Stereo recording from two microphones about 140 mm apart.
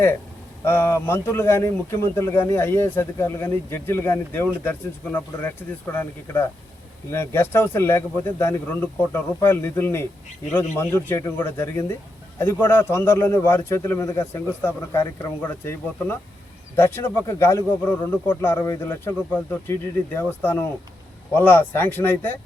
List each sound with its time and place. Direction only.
0.6 s speech: 15° left (ahead or behind)